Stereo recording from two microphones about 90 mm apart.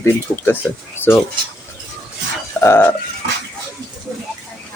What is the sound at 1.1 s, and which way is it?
Speech, 25° left (ahead or behind).